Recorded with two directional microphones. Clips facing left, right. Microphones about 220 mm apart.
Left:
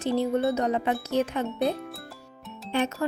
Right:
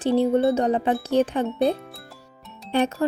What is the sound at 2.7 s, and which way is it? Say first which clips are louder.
Speech: right 4 dB; 35° right (ahead or behind).